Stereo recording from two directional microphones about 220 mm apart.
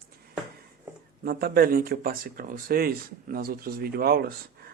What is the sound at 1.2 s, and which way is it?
Speech, 45° right (ahead or behind).